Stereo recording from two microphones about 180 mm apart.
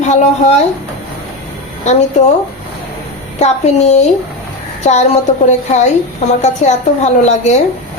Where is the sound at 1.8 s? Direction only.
40° left (ahead or behind).